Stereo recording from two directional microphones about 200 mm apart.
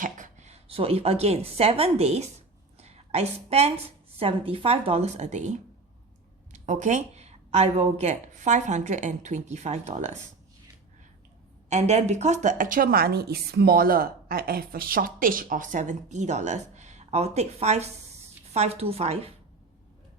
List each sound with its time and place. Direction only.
0.0 s a woman's voice: 35° right (ahead or behind)
11.7 s a woman's voice: 35° right (ahead or behind)